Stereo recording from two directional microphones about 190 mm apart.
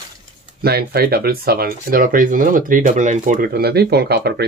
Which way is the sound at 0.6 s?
55° right (ahead or behind).